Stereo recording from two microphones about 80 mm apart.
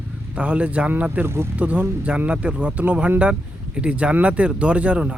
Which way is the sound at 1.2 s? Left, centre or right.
Right.